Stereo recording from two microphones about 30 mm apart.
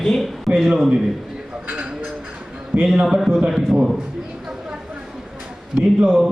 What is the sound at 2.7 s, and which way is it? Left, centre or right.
Speech, right.